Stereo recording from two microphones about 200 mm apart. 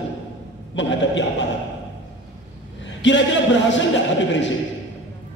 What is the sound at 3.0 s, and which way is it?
Speech, 65° left (ahead or behind).